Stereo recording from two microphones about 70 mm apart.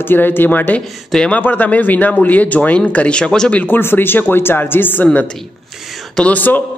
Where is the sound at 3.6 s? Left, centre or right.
Left.